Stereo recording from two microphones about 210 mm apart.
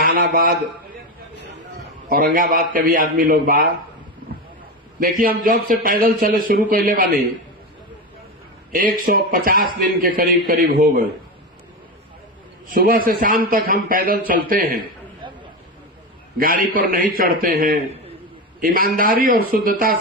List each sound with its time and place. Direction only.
0.0 s a man's voice: 45° right (ahead or behind)
2.0 s speech: 40° right (ahead or behind)
4.9 s a man's voice: 40° right (ahead or behind)
8.7 s speech: 45° right (ahead or behind)
12.7 s speech: 45° right (ahead or behind)
16.4 s speech: 40° right (ahead or behind)